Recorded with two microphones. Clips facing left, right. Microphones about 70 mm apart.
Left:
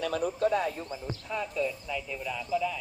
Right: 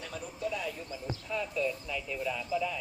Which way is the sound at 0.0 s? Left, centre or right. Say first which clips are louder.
Left 10 dB; left.